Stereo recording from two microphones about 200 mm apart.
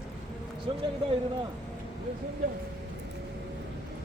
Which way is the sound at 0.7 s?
25° right (ahead or behind).